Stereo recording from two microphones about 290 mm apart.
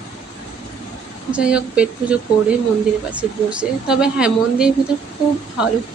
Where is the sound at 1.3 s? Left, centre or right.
Centre.